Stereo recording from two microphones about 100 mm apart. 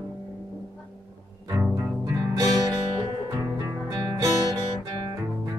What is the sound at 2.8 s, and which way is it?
Music, 70° right (ahead or behind).